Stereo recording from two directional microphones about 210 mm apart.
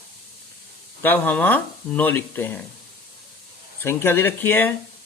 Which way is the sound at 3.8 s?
10° left (ahead or behind).